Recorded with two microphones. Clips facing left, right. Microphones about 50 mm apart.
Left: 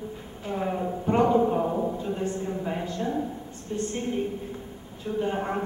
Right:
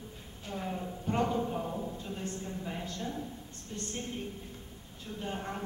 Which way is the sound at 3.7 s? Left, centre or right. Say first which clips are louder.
Left 10 dB; left.